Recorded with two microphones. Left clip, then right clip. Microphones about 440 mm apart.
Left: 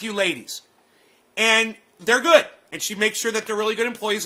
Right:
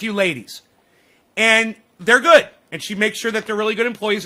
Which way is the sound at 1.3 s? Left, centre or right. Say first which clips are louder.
Right 3 dB; right.